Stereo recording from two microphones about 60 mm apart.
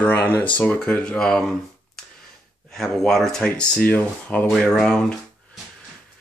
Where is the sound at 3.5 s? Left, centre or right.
Left.